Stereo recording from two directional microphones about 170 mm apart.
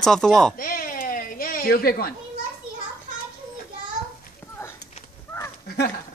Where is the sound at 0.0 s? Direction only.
5° left (ahead or behind).